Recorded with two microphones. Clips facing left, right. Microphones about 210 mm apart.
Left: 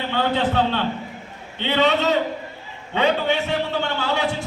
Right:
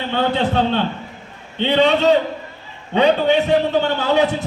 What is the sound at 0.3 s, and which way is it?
A man's voice, 20° right (ahead or behind).